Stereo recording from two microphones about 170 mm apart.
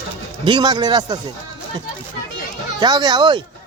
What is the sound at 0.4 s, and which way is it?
Speech, 25° right (ahead or behind).